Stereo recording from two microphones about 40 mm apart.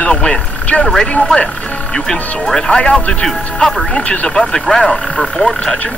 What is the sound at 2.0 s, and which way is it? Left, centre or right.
Speech, centre.